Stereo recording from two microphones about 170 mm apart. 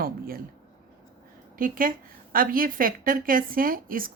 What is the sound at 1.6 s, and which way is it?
A woman's voice, 55° right (ahead or behind).